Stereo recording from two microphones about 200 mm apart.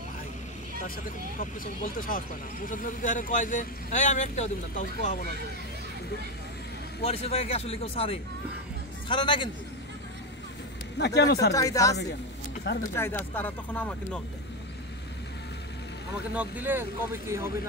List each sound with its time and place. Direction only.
1.4 s speech: 45° left (ahead or behind)
7.0 s speech: 30° left (ahead or behind)
11.0 s speech: 55° left (ahead or behind)
11.5 s speech: 15° left (ahead or behind)
16.3 s speech: 10° right (ahead or behind)